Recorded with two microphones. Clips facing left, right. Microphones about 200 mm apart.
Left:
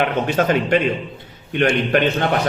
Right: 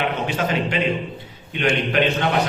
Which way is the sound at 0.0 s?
55° left (ahead or behind).